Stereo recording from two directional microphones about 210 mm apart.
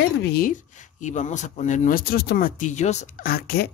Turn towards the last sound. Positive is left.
turn(degrees=45)  # may be behind; listen again after turning